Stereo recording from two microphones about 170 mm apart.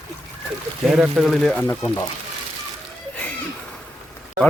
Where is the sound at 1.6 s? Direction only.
15° left (ahead or behind).